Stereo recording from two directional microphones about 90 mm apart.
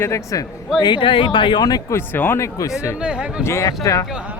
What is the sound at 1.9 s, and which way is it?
Speech, 25° left (ahead or behind).